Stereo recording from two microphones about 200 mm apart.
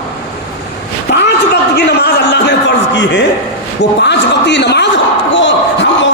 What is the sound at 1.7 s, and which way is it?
A man's voice, 55° left (ahead or behind).